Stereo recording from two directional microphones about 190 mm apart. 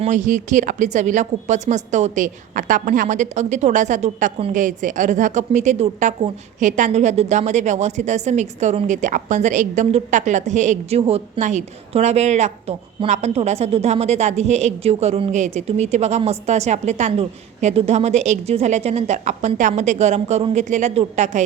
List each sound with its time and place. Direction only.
0.0 s a woman's voice: 40° right (ahead or behind)